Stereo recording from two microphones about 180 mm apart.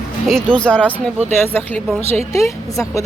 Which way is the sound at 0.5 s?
5° left (ahead or behind).